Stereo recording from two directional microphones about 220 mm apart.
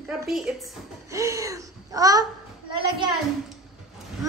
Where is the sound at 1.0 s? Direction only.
15° right (ahead or behind).